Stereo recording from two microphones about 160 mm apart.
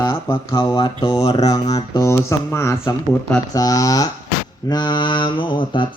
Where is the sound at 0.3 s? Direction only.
25° left (ahead or behind).